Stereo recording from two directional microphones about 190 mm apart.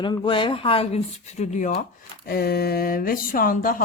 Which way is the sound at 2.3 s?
55° left (ahead or behind).